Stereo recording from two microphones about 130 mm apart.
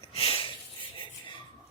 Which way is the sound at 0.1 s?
45° left (ahead or behind).